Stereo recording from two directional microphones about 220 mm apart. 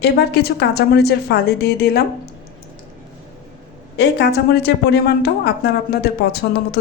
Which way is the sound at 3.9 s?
50° left (ahead or behind).